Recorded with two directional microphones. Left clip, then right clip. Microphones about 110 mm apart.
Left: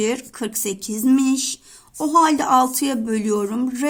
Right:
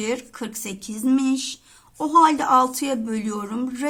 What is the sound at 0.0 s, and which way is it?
A woman's voice, 35° left (ahead or behind).